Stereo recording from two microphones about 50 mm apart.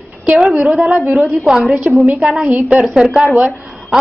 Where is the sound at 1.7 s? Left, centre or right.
Right.